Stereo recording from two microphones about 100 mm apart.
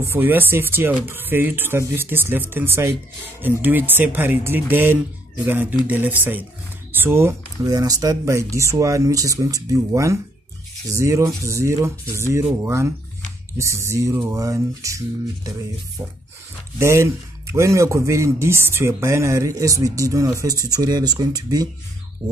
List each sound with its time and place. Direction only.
0.0 s speech: 20° right (ahead or behind)
7.6 s speech: 35° right (ahead or behind)
16.7 s speech: 25° right (ahead or behind)